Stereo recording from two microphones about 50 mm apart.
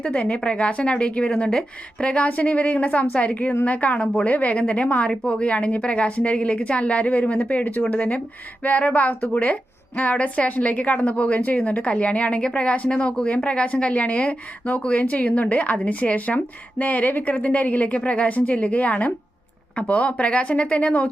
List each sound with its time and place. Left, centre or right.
0.0 s a woman's voice: left